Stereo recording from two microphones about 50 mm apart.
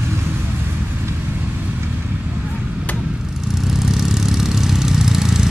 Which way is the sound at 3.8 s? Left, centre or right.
Centre.